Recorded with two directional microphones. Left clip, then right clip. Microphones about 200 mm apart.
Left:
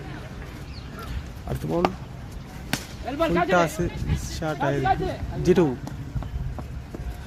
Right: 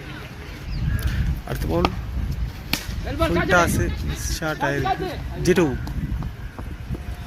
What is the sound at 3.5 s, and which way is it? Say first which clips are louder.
Speech: right 3 dB; 10° left (ahead or behind).